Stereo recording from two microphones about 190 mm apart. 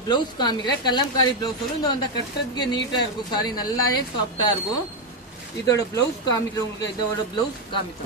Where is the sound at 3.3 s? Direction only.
20° left (ahead or behind).